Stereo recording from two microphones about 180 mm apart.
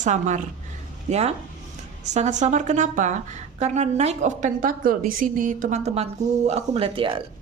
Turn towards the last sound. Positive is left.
turn(degrees=-30)  # may be behind; listen again after turning